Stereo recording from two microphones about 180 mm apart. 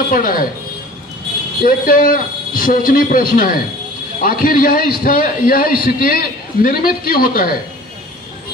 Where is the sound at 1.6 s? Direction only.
50° left (ahead or behind).